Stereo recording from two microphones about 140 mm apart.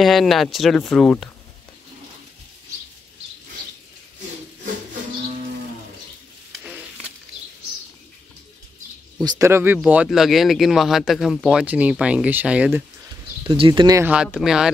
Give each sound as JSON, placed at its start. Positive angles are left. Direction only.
{"t": 0.0, "sound": "speech", "side_deg": 0}
{"t": 9.2, "sound": "speech", "side_deg": -30}
{"t": 9.5, "sound": "speech", "side_deg": -15}
{"t": 10.0, "sound": "speech", "side_deg": 0}
{"t": 13.5, "sound": "speech", "side_deg": -35}
{"t": 14.4, "sound": "speech", "side_deg": -5}